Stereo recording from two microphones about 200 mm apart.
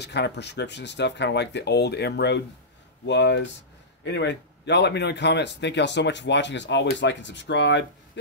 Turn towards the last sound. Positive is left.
turn(degrees=60)  # may be behind; listen again after turning